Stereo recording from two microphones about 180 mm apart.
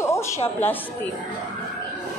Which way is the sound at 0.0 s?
15° left (ahead or behind).